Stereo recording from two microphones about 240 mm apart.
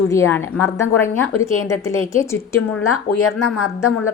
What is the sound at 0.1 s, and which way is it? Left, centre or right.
A woman's voice, centre.